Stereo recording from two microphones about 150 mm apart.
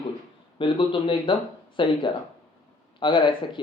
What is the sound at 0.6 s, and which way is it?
Speech, 35° left (ahead or behind).